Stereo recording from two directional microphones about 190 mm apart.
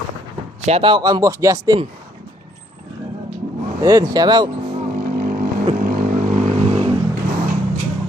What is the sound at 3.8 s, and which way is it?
Speech, 15° right (ahead or behind).